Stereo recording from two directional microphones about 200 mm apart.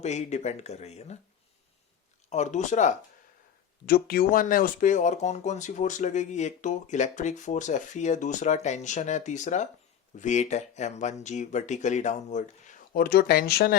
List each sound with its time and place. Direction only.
0.0 s speech: 35° left (ahead or behind)
2.3 s speech: 35° left (ahead or behind)
3.8 s speech: 50° left (ahead or behind)